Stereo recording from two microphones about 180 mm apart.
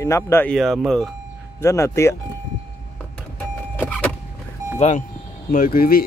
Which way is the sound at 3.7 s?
10° left (ahead or behind).